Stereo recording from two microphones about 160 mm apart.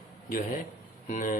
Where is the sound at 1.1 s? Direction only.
55° left (ahead or behind).